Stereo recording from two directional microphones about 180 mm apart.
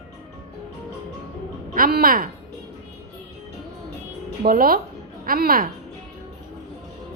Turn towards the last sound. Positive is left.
turn(degrees=-55)  # may be behind; listen again after turning